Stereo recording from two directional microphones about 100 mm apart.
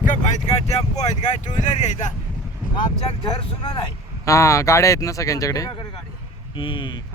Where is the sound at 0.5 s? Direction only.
90° left.